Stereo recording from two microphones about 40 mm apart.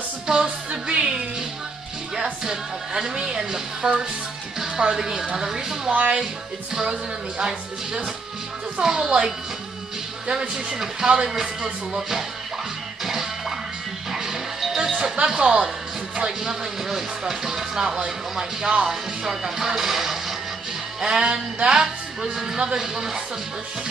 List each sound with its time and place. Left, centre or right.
0.3 s music: right
2.4 s speech: centre
5.9 s speech: right
6.7 s speech: centre
11.1 s speech: centre
13.0 s music: centre
14.8 s speech: centre
18.9 s speech: centre
21.0 s speech: centre